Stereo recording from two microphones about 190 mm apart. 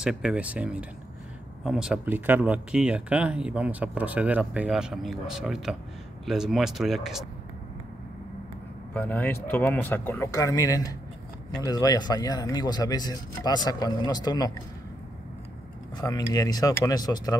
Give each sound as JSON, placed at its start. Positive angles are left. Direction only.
{"t": 0.0, "sound": "speech", "side_deg": -5}
{"t": 8.9, "sound": "speech", "side_deg": 10}
{"t": 16.0, "sound": "speech", "side_deg": 20}